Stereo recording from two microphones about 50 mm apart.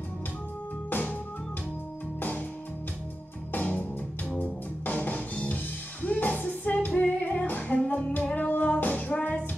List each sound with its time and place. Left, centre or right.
0.8 s music: left
2.1 s music: left
3.5 s music: left